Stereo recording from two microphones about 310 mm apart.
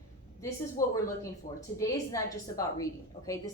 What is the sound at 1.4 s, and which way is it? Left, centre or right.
Speech, left.